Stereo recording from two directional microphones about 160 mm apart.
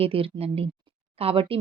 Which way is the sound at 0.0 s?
35° right (ahead or behind).